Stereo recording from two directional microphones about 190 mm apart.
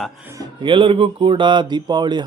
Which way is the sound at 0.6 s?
25° right (ahead or behind).